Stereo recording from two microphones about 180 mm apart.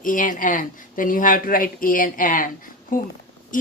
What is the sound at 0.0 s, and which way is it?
Speech, 50° left (ahead or behind).